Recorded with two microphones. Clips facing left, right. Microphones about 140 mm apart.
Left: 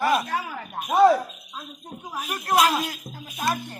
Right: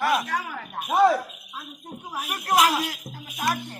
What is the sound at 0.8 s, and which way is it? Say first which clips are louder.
Speech: left 2 dB; 5° right (ahead or behind).